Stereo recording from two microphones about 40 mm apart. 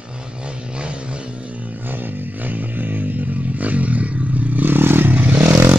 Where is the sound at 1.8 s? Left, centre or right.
Right.